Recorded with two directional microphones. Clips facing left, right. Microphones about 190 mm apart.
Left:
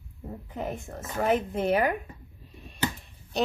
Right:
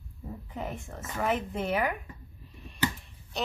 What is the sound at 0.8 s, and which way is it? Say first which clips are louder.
A woman's voice: left 4 dB; 40° left (ahead or behind).